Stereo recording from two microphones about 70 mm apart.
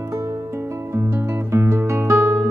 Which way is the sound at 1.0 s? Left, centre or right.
Right.